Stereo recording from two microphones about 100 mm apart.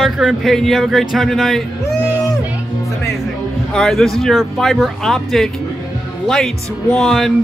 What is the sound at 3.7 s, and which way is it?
Speech, 5° left (ahead or behind).